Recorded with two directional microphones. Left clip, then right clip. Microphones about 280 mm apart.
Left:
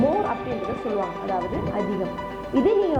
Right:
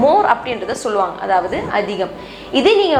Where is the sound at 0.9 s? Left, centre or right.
Centre.